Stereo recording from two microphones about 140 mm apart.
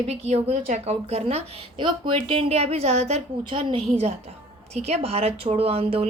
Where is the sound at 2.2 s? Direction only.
45° right (ahead or behind).